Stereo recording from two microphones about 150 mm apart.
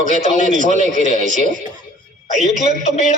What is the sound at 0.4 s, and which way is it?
A man's voice, 60° right (ahead or behind).